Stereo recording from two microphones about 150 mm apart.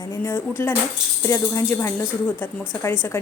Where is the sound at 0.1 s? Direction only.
15° left (ahead or behind).